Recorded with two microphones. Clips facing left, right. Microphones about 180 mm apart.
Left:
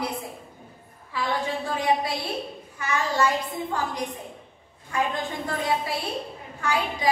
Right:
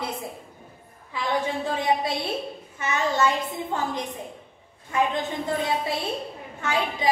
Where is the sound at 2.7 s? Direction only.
25° right (ahead or behind).